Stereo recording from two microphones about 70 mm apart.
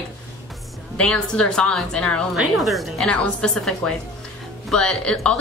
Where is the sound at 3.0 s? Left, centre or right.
Centre.